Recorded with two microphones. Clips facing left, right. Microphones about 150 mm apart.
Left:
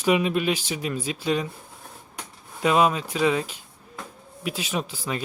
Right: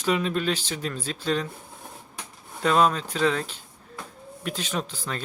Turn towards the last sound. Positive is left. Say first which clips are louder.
# left 2 dB
turn(degrees=10)  # may be behind; listen again after turning